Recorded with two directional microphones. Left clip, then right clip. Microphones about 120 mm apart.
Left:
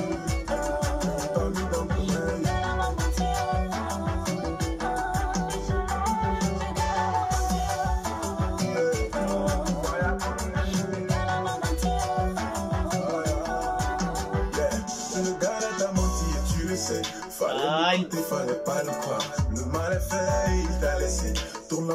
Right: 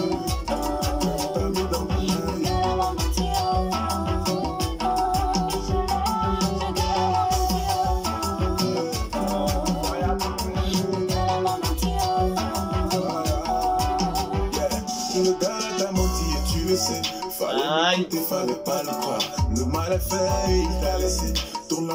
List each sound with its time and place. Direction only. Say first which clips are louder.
17.6 s music: right 3 dB; 10° left (ahead or behind)
20.2 s music: right 3 dB; 25° right (ahead or behind)